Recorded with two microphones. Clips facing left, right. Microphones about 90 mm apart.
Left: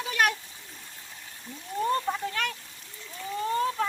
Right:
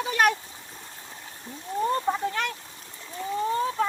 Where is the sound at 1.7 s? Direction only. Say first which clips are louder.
Right 2 dB; 20° right (ahead or behind).